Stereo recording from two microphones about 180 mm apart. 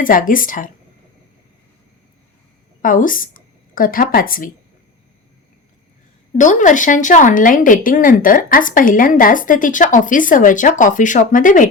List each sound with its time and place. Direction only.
0.0 s speech: 50° left (ahead or behind)
2.8 s a woman's voice: 50° left (ahead or behind)
6.3 s speech: 45° left (ahead or behind)